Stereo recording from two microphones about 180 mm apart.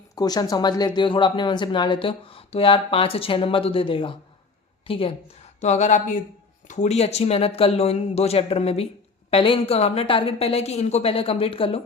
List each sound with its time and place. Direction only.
0.2 s a woman's voice: 20° left (ahead or behind)